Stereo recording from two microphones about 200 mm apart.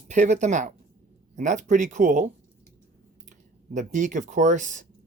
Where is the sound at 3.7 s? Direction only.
35° right (ahead or behind).